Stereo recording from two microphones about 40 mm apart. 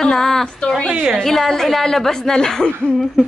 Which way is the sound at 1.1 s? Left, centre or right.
Centre.